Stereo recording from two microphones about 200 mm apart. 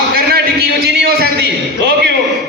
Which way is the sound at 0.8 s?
50° right (ahead or behind).